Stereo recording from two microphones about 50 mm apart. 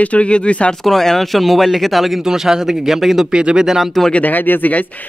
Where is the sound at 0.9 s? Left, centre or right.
Centre.